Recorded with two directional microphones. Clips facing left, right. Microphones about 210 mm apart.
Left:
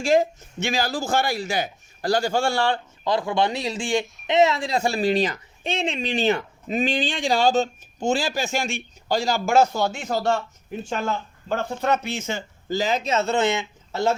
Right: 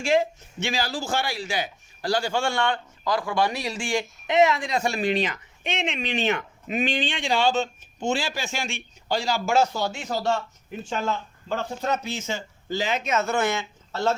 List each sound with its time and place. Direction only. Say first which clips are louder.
0.0 s speech: left 3 dB; 40° left (ahead or behind); by 14.2 s 15° left (ahead or behind)